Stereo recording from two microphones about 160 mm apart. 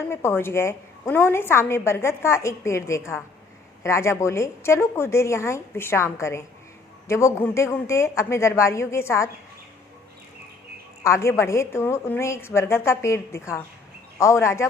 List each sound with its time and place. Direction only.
0.1 s a woman's voice: 15° left (ahead or behind)
11.0 s a woman's voice: 15° left (ahead or behind)